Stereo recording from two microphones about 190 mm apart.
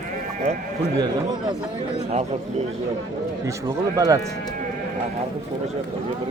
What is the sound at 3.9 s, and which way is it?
Speech, 15° right (ahead or behind).